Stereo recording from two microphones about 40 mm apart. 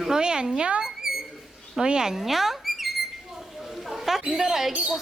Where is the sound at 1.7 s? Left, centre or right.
Centre.